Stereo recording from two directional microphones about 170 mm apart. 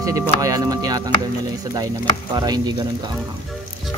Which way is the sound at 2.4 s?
25° right (ahead or behind).